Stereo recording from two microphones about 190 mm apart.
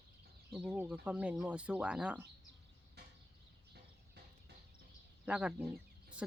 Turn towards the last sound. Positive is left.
turn(degrees=-5)  # may be behind; listen again after turning